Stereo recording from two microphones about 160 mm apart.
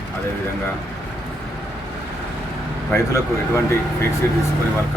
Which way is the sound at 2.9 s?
20° left (ahead or behind).